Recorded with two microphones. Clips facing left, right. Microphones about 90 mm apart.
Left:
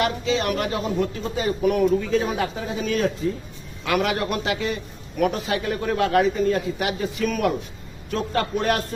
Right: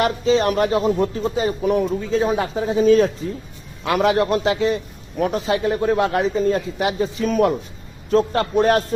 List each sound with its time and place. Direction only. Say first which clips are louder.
0.0 s a man's voice: right 5 dB; 35° right (ahead or behind)